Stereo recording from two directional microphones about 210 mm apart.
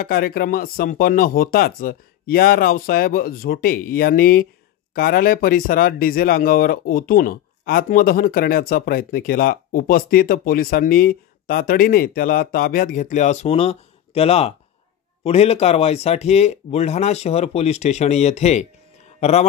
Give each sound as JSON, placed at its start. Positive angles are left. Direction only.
{"t": 0.0, "sound": "speech", "side_deg": 45}